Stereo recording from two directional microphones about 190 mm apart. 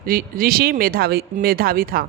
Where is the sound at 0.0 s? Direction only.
50° right (ahead or behind).